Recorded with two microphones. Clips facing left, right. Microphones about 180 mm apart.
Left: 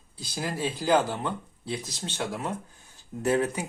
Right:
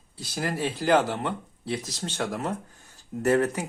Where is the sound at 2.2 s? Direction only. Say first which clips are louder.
Right 2 dB; 45° right (ahead or behind).